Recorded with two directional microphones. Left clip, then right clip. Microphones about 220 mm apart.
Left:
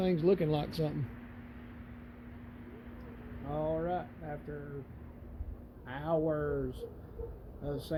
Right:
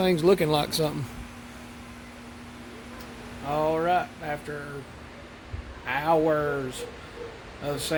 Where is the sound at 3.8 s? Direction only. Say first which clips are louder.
Right 12 dB; 20° right (ahead or behind).